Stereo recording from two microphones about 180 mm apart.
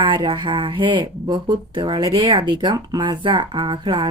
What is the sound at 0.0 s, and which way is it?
Speech, 25° right (ahead or behind).